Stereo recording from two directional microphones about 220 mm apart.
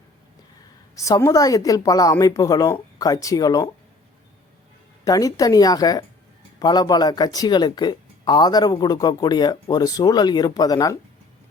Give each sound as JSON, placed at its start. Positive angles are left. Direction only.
{"t": 0.9, "sound": "speech", "side_deg": 15}
{"t": 5.0, "sound": "speech", "side_deg": 15}